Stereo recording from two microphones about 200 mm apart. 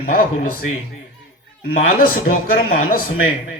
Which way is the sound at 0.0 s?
45° left (ahead or behind).